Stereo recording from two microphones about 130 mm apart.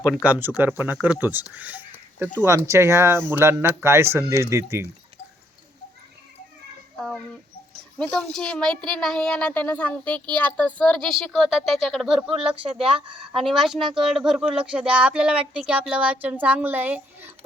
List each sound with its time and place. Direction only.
0.3 s speech: 15° right (ahead or behind)
1.5 s a sound: 10° right (ahead or behind)
2.4 s speech: 20° right (ahead or behind)
6.9 s a child's voice: 5° left (ahead or behind)
13.4 s a woman's voice: centre (ahead or behind)